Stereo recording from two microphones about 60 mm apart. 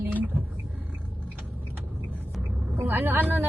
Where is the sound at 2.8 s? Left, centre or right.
Right.